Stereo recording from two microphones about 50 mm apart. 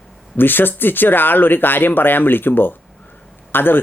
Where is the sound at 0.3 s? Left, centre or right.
Left.